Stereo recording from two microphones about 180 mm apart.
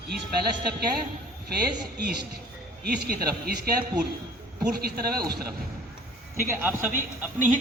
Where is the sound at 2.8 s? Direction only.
60° right (ahead or behind).